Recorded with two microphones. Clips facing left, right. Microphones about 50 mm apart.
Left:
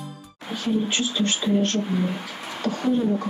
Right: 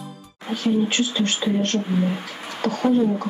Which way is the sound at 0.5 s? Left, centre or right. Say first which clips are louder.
Right 3 dB; right.